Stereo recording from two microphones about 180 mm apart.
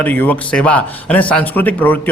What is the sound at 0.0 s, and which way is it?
Speech, 10° left (ahead or behind).